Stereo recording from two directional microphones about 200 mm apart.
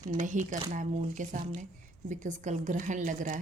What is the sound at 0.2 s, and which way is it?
A woman's voice, 40° right (ahead or behind).